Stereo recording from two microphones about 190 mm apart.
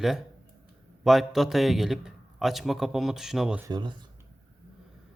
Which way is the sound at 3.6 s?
20° right (ahead or behind).